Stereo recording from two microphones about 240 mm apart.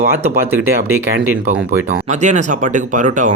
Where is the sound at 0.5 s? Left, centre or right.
Centre.